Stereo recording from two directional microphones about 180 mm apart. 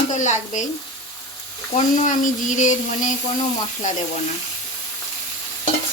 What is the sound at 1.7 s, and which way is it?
Frying, 45° left (ahead or behind).